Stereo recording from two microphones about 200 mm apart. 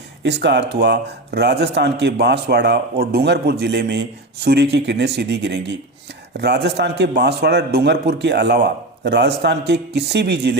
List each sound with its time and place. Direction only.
0.2 s speech: 60° right (ahead or behind)